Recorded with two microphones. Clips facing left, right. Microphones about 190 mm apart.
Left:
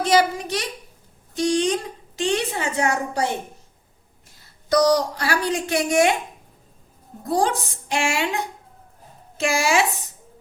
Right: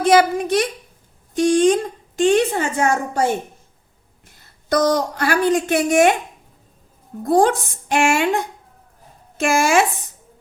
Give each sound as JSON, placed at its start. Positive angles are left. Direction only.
{"t": 0.0, "sound": "a woman's voice", "side_deg": -55}
{"t": 4.7, "sound": "a woman's voice", "side_deg": -55}
{"t": 7.3, "sound": "a woman's voice", "side_deg": -55}